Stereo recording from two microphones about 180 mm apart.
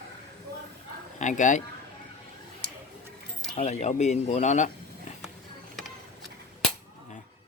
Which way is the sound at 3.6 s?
40° left (ahead or behind).